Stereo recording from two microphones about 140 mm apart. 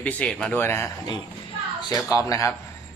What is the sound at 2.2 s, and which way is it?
Speech, 25° left (ahead or behind).